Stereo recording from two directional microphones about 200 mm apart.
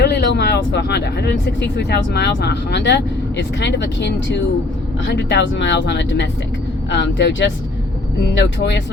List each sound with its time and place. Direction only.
0.0 s speech: 60° left (ahead or behind)